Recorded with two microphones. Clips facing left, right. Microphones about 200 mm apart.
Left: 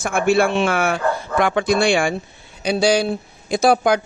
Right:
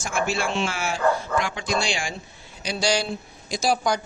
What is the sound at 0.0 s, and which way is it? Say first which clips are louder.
A man's voice: left 9 dB; 55° left (ahead or behind).